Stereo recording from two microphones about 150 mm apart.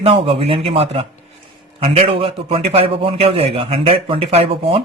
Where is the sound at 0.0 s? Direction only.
45° right (ahead or behind).